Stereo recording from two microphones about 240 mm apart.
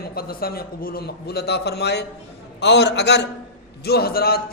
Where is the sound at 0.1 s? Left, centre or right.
Left.